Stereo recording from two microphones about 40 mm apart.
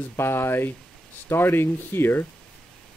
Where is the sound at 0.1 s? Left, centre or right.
Left.